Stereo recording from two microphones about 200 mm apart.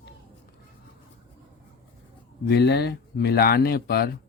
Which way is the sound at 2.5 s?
55° left (ahead or behind).